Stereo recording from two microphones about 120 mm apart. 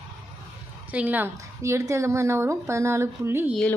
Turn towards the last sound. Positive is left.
turn(degrees=-20)  # may be behind; listen again after turning